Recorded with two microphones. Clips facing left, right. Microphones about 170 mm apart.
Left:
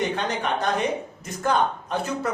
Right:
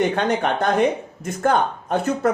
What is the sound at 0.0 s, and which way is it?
A man's voice, 55° right (ahead or behind).